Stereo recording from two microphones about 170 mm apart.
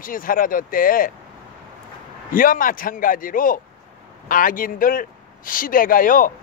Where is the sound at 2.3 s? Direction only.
55° left (ahead or behind).